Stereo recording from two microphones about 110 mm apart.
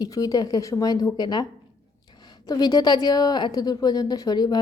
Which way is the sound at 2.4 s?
35° left (ahead or behind).